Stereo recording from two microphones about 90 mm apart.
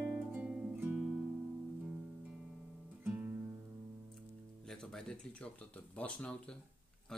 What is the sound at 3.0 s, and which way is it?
Music, 15° right (ahead or behind).